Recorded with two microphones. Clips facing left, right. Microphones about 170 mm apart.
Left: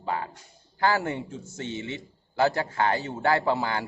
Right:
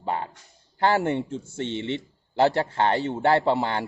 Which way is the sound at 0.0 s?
25° right (ahead or behind).